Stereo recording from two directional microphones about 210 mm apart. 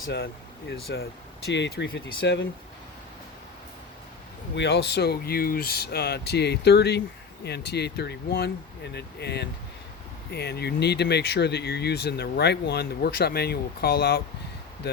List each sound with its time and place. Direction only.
0.0 s speech: 55° left (ahead or behind)
4.5 s speech: 55° left (ahead or behind)